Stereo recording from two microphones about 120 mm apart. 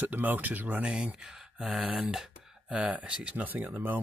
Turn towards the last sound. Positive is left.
turn(degrees=-10)  # may be behind; listen again after turning